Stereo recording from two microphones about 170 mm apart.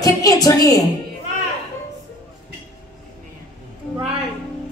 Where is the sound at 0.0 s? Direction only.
20° left (ahead or behind).